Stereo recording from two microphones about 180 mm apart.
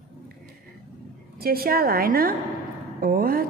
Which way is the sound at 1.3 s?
55° right (ahead or behind).